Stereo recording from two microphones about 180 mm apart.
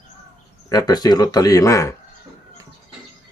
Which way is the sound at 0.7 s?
20° left (ahead or behind).